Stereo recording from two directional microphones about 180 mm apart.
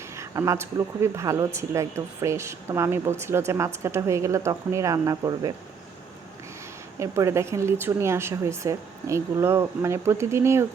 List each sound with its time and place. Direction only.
0.2 s speech: 15° right (ahead or behind)
7.0 s speech: 15° right (ahead or behind)